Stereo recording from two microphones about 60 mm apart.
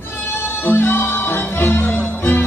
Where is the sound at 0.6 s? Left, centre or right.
Left.